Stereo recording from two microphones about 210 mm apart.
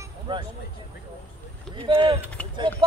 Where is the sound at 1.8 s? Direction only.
25° right (ahead or behind).